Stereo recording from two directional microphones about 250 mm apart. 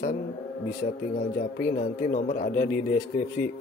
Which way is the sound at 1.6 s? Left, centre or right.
Left.